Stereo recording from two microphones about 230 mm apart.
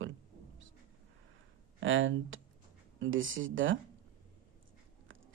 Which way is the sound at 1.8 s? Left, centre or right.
Right.